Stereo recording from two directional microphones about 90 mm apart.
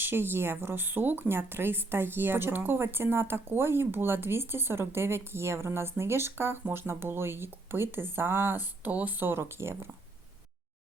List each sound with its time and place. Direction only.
0.0 s speech: 25° right (ahead or behind)